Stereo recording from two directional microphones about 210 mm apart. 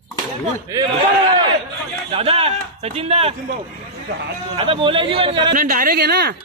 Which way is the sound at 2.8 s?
30° right (ahead or behind).